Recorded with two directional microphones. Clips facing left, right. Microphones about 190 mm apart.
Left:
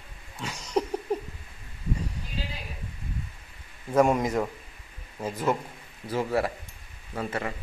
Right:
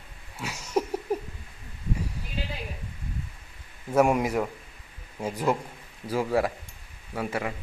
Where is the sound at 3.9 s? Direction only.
10° right (ahead or behind).